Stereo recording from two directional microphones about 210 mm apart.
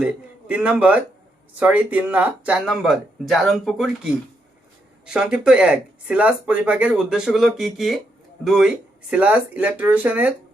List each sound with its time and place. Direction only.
0.0 s speech: 5° right (ahead or behind)